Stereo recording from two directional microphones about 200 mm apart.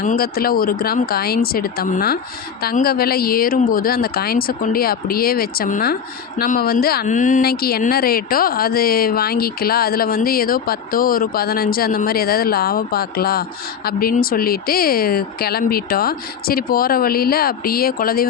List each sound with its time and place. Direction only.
0.0 s speech: 45° left (ahead or behind)